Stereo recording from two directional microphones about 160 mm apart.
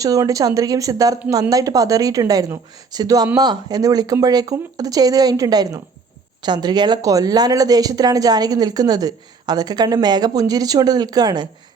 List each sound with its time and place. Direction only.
0.0 s speech: 20° right (ahead or behind)